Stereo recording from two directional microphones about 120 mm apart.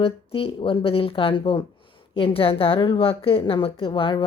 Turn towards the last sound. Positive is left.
turn(degrees=45)  # may be behind; listen again after turning